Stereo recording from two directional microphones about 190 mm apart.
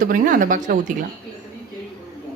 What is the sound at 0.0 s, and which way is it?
Speech, 45° right (ahead or behind).